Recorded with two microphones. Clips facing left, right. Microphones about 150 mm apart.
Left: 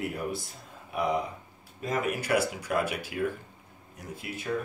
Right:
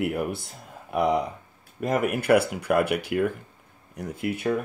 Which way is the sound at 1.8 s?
60° right (ahead or behind).